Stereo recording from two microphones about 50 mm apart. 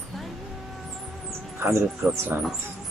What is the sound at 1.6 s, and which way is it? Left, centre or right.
Speech, right.